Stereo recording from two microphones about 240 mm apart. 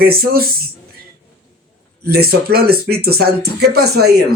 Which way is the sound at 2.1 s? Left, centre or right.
Right.